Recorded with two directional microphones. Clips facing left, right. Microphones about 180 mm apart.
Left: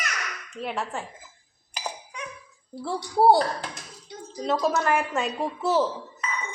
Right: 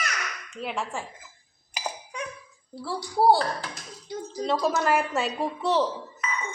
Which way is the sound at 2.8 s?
20° left (ahead or behind).